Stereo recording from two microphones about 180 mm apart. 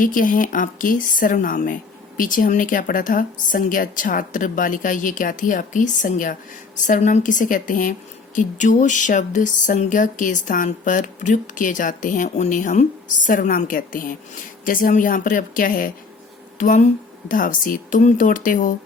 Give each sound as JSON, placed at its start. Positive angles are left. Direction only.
{"t": 0.0, "sound": "speech", "side_deg": 50}